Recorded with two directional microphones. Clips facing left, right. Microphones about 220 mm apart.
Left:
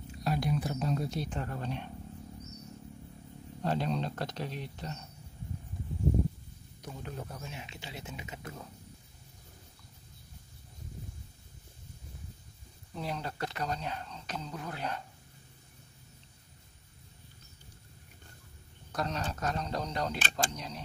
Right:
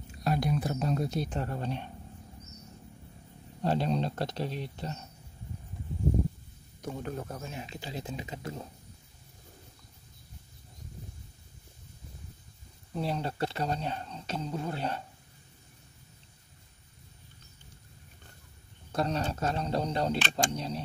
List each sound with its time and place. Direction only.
0.2 s speech: 50° right (ahead or behind); by 1.9 s 30° right (ahead or behind)
3.6 s speech: 30° right (ahead or behind)
6.8 s speech: 50° right (ahead or behind); by 8.6 s 30° right (ahead or behind)
12.9 s speech: 30° right (ahead or behind)
18.9 s speech: 30° right (ahead or behind)